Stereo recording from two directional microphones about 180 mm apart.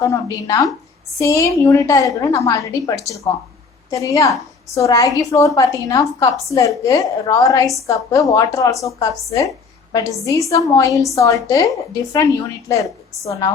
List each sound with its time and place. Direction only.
0.0 s a woman's voice: 20° left (ahead or behind)